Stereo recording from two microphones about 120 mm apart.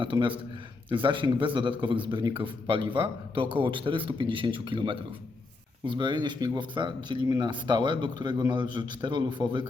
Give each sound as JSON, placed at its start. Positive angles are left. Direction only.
{"t": 0.0, "sound": "a man's voice", "side_deg": -45}